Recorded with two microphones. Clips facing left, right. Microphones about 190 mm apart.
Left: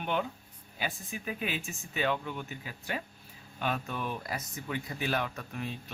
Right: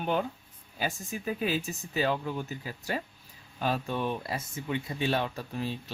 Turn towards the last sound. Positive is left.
turn(degrees=-30)  # may be behind; listen again after turning